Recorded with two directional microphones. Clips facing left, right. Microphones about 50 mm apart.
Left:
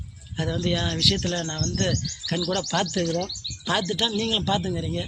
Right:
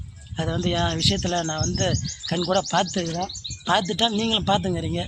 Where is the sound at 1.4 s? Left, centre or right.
Right.